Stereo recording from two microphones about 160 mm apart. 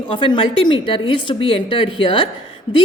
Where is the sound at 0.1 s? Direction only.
35° left (ahead or behind).